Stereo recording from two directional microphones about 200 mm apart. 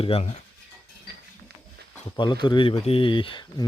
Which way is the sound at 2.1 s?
25° left (ahead or behind).